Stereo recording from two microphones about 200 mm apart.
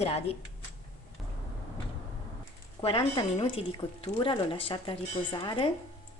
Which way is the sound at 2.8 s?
25° left (ahead or behind).